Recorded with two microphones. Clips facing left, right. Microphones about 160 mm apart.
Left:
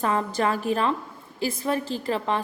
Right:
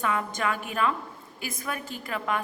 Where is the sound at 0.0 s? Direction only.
35° left (ahead or behind).